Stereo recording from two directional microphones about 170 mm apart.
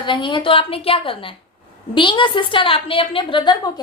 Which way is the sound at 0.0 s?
30° left (ahead or behind).